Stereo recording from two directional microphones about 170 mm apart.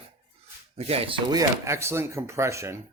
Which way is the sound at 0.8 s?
35° right (ahead or behind).